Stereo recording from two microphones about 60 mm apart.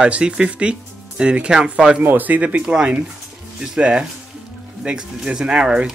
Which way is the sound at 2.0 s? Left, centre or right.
Right.